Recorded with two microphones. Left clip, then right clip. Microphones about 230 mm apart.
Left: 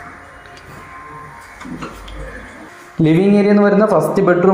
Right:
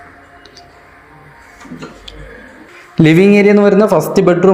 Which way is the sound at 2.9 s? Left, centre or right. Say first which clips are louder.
Right 5 dB; right.